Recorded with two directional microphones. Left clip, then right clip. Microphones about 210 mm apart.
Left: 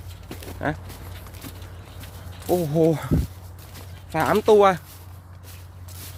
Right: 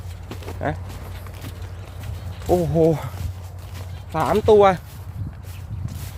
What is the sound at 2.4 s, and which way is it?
Speech, centre (ahead or behind).